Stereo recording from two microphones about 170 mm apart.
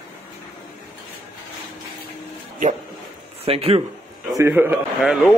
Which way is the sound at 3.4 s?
35° right (ahead or behind).